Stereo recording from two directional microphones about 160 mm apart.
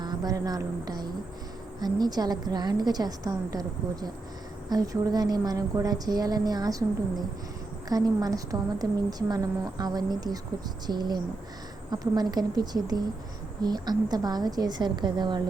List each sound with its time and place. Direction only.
0.0 s a sound: 25° right (ahead or behind)
1.8 s a woman's voice: 25° right (ahead or behind)
7.9 s a woman's voice: 25° right (ahead or behind)